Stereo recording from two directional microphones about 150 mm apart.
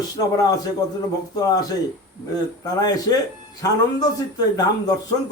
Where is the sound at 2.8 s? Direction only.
25° left (ahead or behind).